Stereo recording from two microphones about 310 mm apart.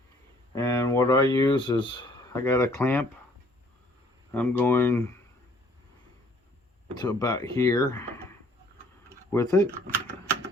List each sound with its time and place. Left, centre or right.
0.5 s speech: centre
4.4 s speech: centre
7.0 s speech: centre
9.3 s speech: centre